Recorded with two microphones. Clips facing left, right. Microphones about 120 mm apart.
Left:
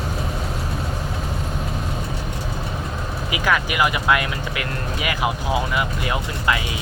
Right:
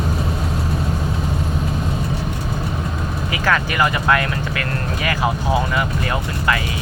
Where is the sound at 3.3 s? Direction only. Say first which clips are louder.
Right 1 dB; 10° left (ahead or behind).